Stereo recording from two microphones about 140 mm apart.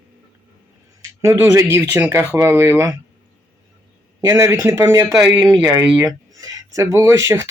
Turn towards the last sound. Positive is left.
turn(degrees=-20)  # may be behind; listen again after turning